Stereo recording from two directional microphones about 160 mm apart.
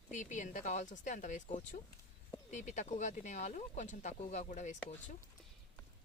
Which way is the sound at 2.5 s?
45° left (ahead or behind).